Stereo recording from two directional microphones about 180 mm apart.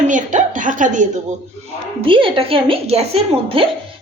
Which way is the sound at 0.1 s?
45° right (ahead or behind).